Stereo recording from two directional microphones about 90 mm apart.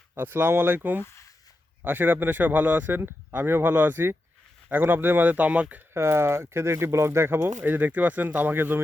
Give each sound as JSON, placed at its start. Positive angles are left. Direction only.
{"t": 0.1, "sound": "speech", "side_deg": -25}
{"t": 5.9, "sound": "speech", "side_deg": -30}